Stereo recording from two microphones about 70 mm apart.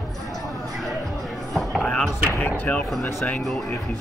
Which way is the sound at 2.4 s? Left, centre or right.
Left.